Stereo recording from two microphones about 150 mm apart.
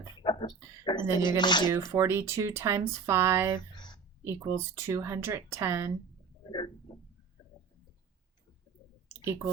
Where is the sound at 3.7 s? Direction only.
30° left (ahead or behind).